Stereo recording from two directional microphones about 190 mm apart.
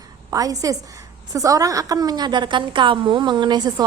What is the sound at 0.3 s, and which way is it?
A woman's voice, 20° right (ahead or behind).